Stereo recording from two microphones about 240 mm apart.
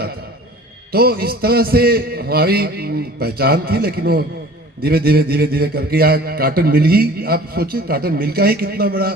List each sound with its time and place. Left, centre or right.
0.9 s a man's voice: right